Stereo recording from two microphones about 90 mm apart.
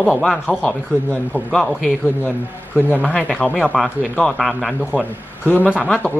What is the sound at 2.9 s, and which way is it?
Speech, 20° left (ahead or behind).